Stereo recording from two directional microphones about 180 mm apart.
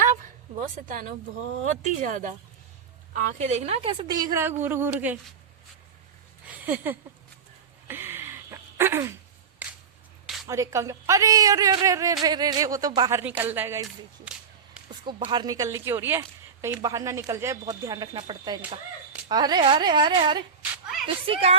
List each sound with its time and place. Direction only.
0.9 s a woman's voice: 50° right (ahead or behind); by 5.1 s 10° right (ahead or behind)
7.9 s a sound: 10° right (ahead or behind)
10.4 s a woman's voice: 15° right (ahead or behind)
15.0 s a woman's voice: 25° right (ahead or behind)